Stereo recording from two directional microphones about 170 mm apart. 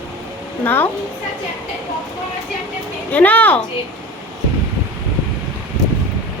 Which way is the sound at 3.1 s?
10° left (ahead or behind).